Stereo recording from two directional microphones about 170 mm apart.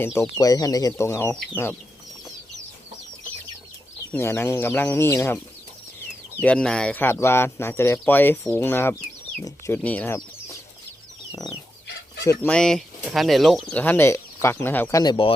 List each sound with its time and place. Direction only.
0.2 s speech: 20° left (ahead or behind)
4.1 s speech: 15° left (ahead or behind)
6.4 s speech: 5° left (ahead or behind)
11.3 s chicken: 20° left (ahead or behind)
12.2 s speech: 20° left (ahead or behind)
12.5 s speech: 5° left (ahead or behind)
15.0 s speech: 25° left (ahead or behind)